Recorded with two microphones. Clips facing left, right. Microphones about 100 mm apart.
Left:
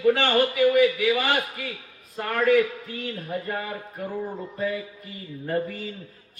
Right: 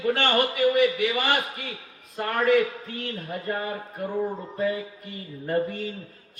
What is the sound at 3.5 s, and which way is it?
Speech, 30° right (ahead or behind).